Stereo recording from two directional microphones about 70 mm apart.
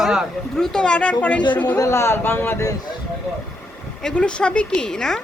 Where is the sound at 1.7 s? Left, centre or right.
Left.